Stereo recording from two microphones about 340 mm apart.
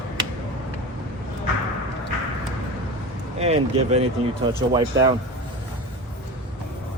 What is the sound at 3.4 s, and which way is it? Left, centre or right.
Speech, centre.